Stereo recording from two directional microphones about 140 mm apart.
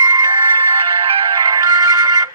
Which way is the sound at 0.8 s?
40° right (ahead or behind).